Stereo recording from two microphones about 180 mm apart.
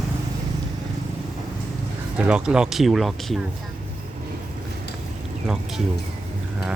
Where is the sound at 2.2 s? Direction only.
5° right (ahead or behind).